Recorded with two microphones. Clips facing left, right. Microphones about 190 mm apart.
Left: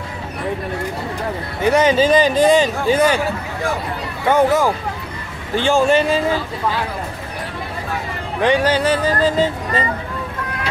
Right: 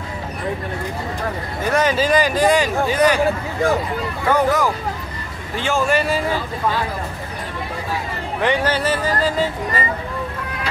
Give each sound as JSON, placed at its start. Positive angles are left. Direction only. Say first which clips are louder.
{"t": 1.7, "sound": "speech", "louder": "left 4 dB", "side_deg": 20}
{"t": 4.3, "sound": "speech", "louder": "left 3 dB", "side_deg": 25}
{"t": 8.4, "sound": "speech", "louder": "left 4 dB", "side_deg": 15}